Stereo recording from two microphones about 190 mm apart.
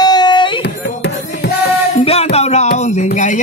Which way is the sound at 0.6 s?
60° left (ahead or behind).